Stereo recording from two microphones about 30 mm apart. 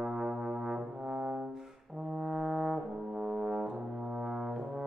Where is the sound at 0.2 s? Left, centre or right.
Right.